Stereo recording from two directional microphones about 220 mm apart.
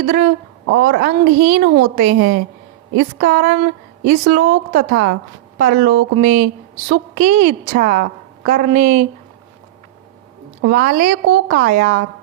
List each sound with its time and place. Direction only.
0.0 s a woman's voice: 40° right (ahead or behind)
10.6 s a woman's voice: 40° right (ahead or behind)